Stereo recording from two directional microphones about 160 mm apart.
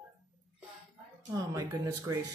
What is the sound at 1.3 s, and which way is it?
Speech, 20° right (ahead or behind).